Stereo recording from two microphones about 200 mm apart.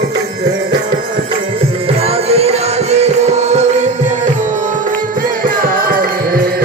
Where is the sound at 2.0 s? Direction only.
30° right (ahead or behind).